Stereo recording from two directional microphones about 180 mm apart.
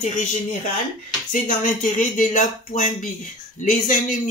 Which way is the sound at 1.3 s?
50° left (ahead or behind).